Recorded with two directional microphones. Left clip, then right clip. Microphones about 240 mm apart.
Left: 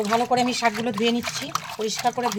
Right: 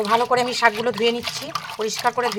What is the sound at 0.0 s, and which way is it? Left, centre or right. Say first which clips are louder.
Speech: right 3 dB; centre.